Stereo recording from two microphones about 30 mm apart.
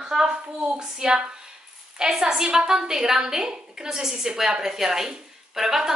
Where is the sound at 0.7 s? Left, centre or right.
Right.